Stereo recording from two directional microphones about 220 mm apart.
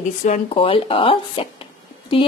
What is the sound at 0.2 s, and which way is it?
Speech, 30° left (ahead or behind).